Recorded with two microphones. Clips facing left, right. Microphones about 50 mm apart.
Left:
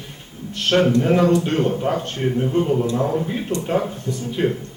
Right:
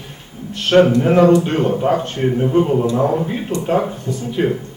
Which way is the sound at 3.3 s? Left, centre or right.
Centre.